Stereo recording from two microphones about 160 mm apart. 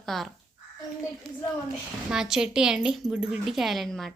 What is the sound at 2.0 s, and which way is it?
A woman's voice, 5° right (ahead or behind).